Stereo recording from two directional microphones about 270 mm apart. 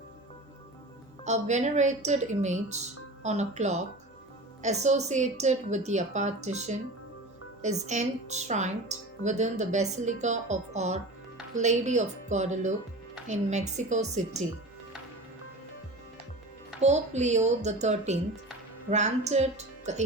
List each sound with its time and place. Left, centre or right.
1.2 s speech: right
16.8 s speech: right